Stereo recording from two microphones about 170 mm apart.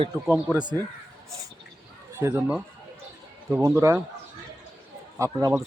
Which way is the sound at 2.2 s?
15° right (ahead or behind).